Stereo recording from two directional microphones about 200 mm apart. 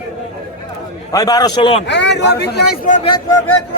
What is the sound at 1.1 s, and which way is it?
Speech, 20° left (ahead or behind).